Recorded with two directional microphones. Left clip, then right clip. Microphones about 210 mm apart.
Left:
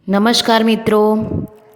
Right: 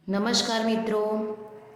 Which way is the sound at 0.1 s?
45° left (ahead or behind).